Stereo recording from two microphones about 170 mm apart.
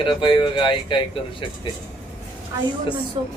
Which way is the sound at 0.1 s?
30° left (ahead or behind).